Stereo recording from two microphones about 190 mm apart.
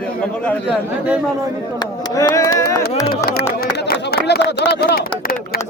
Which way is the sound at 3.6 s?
55° left (ahead or behind).